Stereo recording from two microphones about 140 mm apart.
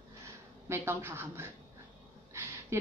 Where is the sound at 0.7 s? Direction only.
15° right (ahead or behind).